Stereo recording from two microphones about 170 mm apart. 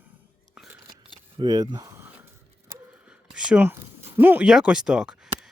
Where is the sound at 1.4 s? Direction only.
25° right (ahead or behind).